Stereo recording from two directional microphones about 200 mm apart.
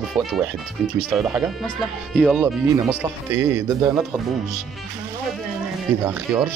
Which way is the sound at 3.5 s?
20° right (ahead or behind).